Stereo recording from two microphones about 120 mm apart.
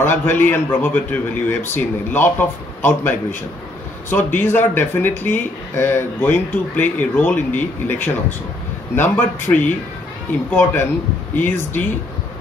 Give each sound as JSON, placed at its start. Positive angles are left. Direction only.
{"t": 0.0, "sound": "speech", "side_deg": 15}